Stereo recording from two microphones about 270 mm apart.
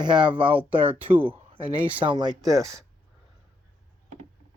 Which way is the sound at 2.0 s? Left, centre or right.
Centre.